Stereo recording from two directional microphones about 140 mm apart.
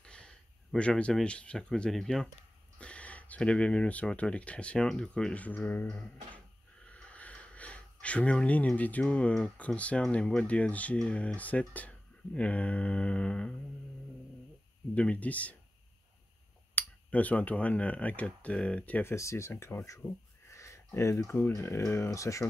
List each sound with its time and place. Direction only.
0.0 s speech: 5° left (ahead or behind)
12.4 s mantra: 10° left (ahead or behind)
15.0 s mantra: 10° left (ahead or behind)
16.7 s speech: 10° left (ahead or behind)